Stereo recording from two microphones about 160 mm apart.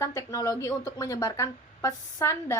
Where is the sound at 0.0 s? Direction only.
20° left (ahead or behind).